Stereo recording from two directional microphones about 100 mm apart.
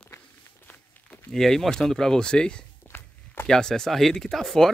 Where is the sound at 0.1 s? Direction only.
30° left (ahead or behind).